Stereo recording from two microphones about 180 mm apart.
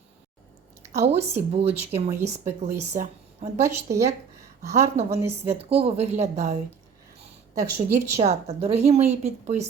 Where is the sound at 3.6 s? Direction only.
15° right (ahead or behind).